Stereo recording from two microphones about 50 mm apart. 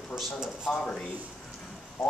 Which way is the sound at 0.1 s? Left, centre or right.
Centre.